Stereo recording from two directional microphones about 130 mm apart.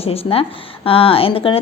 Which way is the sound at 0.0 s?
50° left (ahead or behind).